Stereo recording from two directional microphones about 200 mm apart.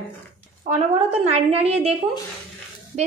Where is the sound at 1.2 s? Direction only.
30° right (ahead or behind).